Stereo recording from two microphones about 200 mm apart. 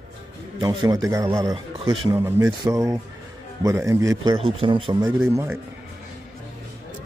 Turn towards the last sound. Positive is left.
turn(degrees=-10)  # may be behind; listen again after turning